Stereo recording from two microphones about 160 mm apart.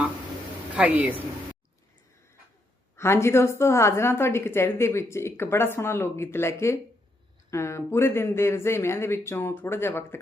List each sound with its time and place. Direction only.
0.8 s speech: 10° right (ahead or behind)
2.9 s a woman's voice: 15° left (ahead or behind)